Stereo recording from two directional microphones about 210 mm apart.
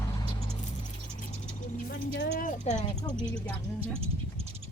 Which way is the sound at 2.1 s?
55° left (ahead or behind).